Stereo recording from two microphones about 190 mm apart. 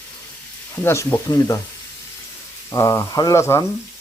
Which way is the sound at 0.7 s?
15° left (ahead or behind).